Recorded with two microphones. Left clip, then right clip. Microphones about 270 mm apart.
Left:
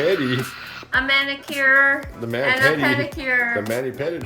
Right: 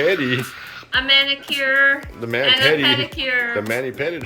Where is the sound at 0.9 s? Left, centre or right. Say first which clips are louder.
Right 3 dB; centre.